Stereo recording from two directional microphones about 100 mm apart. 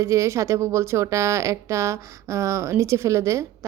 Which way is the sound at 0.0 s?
30° right (ahead or behind).